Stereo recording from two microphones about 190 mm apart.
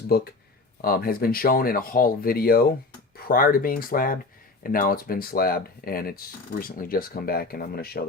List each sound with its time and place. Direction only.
0.1 s speech: 50° left (ahead or behind)